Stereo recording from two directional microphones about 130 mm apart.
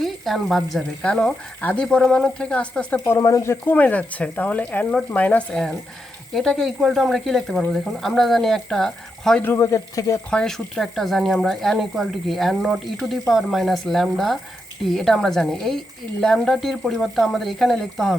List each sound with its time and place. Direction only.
0.0 s speech: centre (ahead or behind)
3.0 s speech: 20° left (ahead or behind); by 9.4 s 5° left (ahead or behind)
9.4 s speech: 20° left (ahead or behind)
10.2 s speech: 5° left (ahead or behind)